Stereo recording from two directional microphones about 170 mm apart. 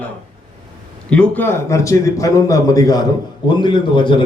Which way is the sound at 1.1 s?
10° left (ahead or behind).